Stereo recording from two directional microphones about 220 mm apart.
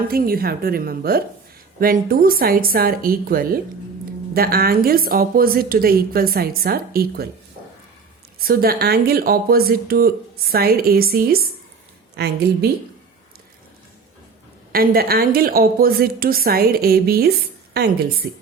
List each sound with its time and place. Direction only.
0.1 s a woman's voice: 40° right (ahead or behind)
8.4 s speech: 45° right (ahead or behind)
14.7 s speech: 45° right (ahead or behind)